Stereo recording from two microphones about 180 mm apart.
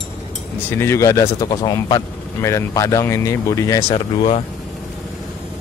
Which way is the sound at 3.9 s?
30° left (ahead or behind).